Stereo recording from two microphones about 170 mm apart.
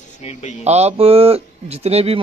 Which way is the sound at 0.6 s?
40° right (ahead or behind).